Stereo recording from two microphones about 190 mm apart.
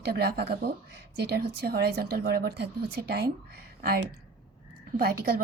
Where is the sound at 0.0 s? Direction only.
60° right (ahead or behind).